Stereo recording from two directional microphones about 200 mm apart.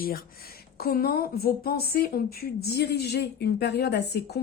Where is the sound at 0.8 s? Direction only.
50° left (ahead or behind).